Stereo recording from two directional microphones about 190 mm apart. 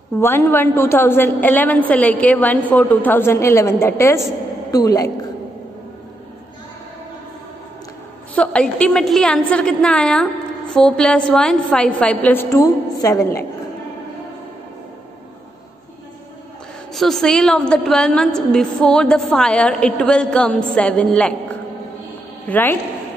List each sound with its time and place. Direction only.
0.2 s a woman's voice: 10° left (ahead or behind)
8.4 s a woman's voice: 5° left (ahead or behind)
16.9 s a woman's voice: centre (ahead or behind)